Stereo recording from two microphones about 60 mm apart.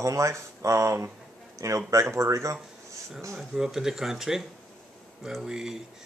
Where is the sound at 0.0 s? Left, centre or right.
Right.